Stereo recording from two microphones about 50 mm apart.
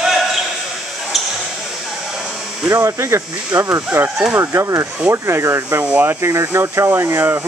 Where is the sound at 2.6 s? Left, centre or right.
Right.